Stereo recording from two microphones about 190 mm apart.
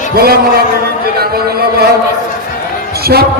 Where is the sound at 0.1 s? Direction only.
55° right (ahead or behind).